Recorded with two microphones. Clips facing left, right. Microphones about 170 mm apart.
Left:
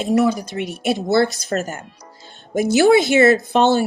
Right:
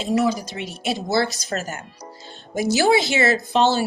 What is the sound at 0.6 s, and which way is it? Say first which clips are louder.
Speech: left 6 dB; 45° left (ahead or behind).